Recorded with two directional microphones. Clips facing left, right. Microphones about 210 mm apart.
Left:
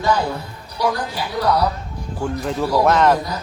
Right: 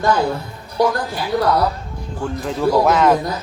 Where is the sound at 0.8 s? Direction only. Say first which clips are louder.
Right 4 dB; 50° right (ahead or behind).